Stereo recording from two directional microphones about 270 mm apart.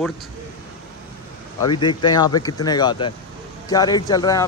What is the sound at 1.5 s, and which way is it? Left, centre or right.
Speech, centre.